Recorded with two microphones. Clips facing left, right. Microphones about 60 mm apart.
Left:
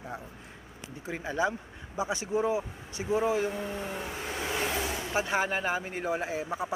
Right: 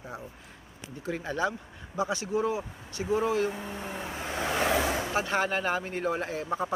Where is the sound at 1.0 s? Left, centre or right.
Centre.